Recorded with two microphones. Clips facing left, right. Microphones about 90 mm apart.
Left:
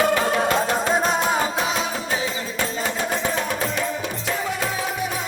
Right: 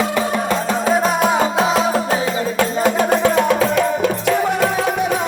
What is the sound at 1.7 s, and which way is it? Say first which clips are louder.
Music: right 8 dB; 35° right (ahead or behind).